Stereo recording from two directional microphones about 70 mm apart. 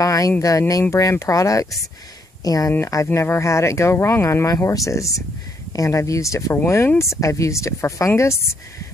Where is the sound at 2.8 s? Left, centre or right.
Left.